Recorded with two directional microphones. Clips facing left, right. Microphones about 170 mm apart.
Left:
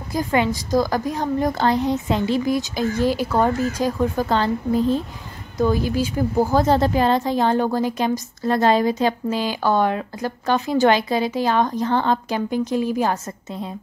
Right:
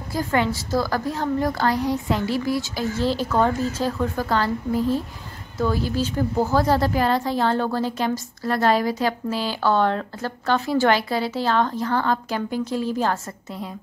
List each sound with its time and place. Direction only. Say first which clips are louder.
0.1 s a woman's voice: left 2 dB; 15° left (ahead or behind)